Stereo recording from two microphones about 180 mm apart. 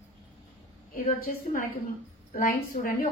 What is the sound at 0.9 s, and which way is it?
A woman's voice, 55° left (ahead or behind).